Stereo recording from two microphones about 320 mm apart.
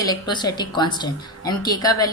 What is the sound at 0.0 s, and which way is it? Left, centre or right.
A woman's voice, centre.